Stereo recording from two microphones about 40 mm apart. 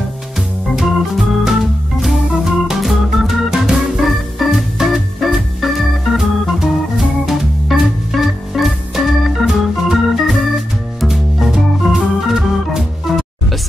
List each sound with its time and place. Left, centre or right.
0.7 s organ: centre
3.5 s organ: centre
4.0 s organ: centre